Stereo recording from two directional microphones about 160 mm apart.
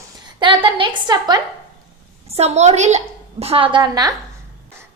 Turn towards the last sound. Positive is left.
turn(degrees=-25)  # may be behind; listen again after turning